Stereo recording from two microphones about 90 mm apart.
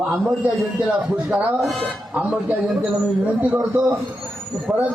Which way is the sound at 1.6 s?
Centre (ahead or behind).